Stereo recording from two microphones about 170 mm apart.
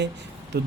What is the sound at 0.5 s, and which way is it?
Speech, 75° right (ahead or behind).